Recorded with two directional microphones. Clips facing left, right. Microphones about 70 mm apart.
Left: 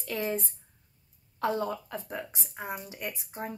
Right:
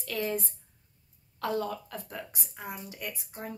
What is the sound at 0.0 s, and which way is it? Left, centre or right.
Speech, left.